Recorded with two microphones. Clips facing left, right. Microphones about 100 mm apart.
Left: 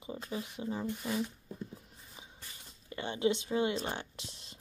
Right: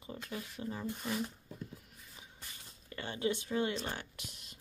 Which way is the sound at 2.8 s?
20° left (ahead or behind).